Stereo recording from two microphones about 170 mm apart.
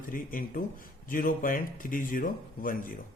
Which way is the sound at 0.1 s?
55° left (ahead or behind).